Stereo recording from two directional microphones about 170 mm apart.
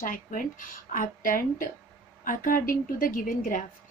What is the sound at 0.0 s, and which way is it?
A woman's voice, 55° left (ahead or behind).